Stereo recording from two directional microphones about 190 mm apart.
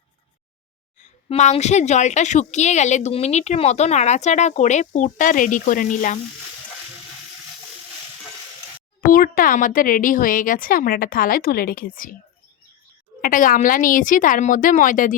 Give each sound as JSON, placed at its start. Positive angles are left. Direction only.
{"t": 1.0, "sound": "a woman's voice", "side_deg": 35}
{"t": 9.0, "sound": "speech", "side_deg": 45}
{"t": 13.2, "sound": "speech", "side_deg": 45}